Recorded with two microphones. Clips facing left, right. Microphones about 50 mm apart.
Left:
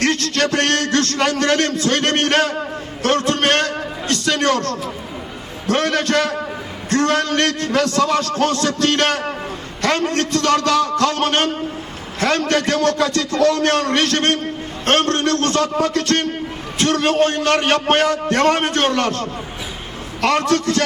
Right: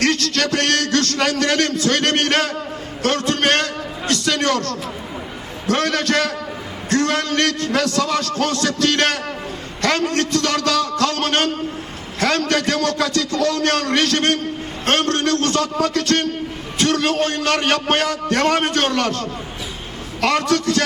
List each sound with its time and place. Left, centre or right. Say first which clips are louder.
0.0 s a man's voice: left 1 dB; left
3.0 s a sound: left 2 dB; left
4.1 s a man's voice: left 1 dB; left